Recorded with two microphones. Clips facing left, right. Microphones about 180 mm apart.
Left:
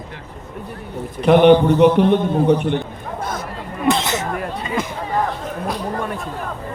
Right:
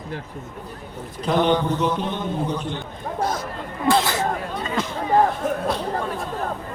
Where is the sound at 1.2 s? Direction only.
65° left (ahead or behind).